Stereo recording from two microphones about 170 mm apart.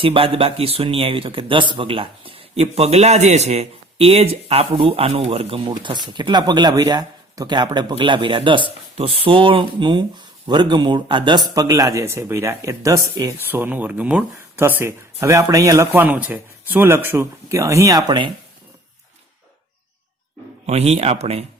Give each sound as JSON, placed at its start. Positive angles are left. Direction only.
{"t": 0.0, "sound": "speech", "side_deg": -35}
{"t": 20.7, "sound": "speech", "side_deg": -40}